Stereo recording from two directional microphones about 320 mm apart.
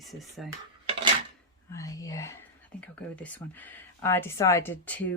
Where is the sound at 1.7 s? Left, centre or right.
Centre.